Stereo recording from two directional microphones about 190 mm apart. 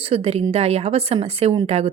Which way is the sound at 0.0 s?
30° right (ahead or behind).